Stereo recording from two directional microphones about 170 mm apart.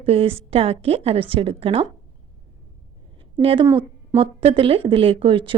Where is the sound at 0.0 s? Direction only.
35° right (ahead or behind).